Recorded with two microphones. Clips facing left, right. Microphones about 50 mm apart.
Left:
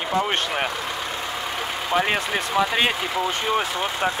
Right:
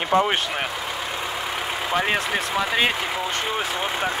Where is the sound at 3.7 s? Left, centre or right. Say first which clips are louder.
Left 1 dB; centre.